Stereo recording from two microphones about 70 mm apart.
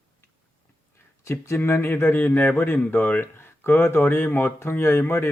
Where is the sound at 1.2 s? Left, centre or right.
Left.